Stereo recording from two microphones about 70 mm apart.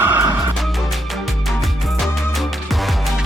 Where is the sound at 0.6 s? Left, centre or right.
Centre.